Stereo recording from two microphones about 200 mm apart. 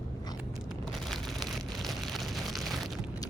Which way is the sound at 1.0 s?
Centre (ahead or behind).